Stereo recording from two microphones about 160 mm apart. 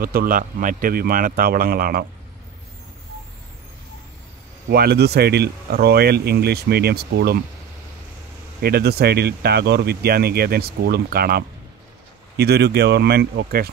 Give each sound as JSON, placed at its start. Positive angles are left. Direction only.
{"t": 0.0, "sound": "speech", "side_deg": -65}
{"t": 4.6, "sound": "speech", "side_deg": -80}
{"t": 8.6, "sound": "speech", "side_deg": -80}
{"t": 12.4, "sound": "speech", "side_deg": -90}